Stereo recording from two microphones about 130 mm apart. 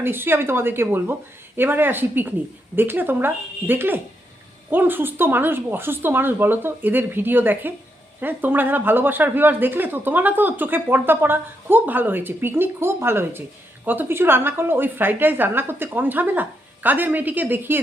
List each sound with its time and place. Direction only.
0.0 s speech: 15° right (ahead or behind)